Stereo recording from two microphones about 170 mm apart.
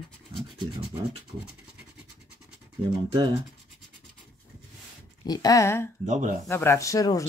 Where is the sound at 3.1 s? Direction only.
30° right (ahead or behind).